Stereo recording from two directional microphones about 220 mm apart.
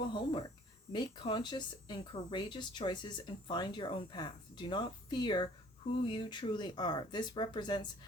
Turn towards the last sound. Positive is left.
turn(degrees=20)  # may be behind; listen again after turning